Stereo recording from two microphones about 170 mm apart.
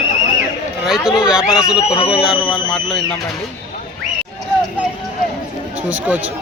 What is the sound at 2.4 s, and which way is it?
Speech, 5° left (ahead or behind).